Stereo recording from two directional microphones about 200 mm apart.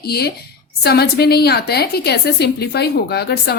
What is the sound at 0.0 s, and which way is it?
A woman's voice, 55° left (ahead or behind).